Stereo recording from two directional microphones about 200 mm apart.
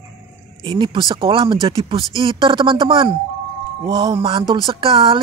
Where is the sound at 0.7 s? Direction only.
25° right (ahead or behind).